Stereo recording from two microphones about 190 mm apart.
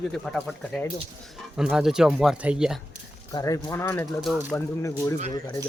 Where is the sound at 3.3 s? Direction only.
15° left (ahead or behind).